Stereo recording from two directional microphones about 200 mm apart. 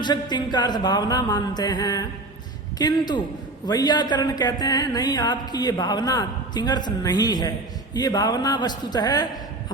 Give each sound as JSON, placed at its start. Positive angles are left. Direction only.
{"t": 0.0, "sound": "speech", "side_deg": 20}